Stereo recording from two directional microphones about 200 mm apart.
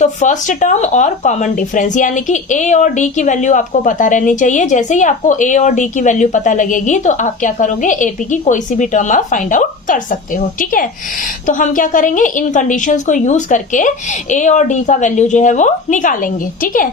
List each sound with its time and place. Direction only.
0.0 s speech: 35° left (ahead or behind)